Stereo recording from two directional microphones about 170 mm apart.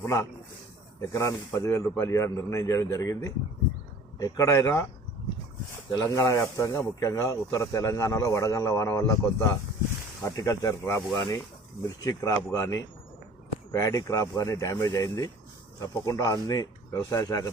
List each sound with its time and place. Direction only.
0.0 s speech: 20° left (ahead or behind)
5.9 s speech: 20° left (ahead or behind)